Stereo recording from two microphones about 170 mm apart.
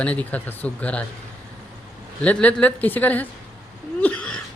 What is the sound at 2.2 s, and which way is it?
Speech, 10° left (ahead or behind).